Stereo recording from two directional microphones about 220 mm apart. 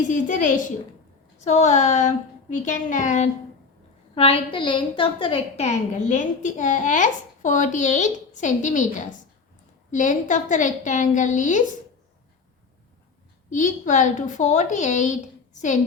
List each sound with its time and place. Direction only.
0.1 s a woman's voice: 35° left (ahead or behind)
13.5 s a woman's voice: 35° left (ahead or behind)